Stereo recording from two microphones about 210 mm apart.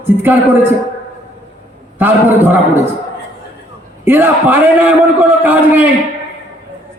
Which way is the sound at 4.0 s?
10° right (ahead or behind).